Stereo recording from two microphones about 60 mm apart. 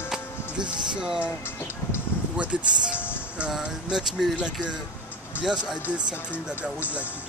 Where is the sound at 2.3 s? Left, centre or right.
Centre.